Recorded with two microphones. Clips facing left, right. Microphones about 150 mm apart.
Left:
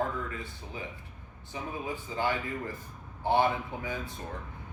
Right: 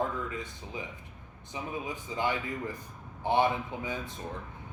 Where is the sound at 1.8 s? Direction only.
15° right (ahead or behind).